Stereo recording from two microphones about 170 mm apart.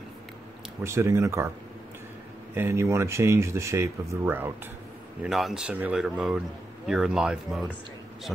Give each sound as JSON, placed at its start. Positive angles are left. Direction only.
{"t": 0.8, "sound": "speech", "side_deg": -15}
{"t": 2.5, "sound": "speech", "side_deg": -15}
{"t": 5.2, "sound": "speech", "side_deg": 0}